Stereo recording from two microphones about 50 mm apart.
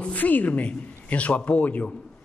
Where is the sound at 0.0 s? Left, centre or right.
Left.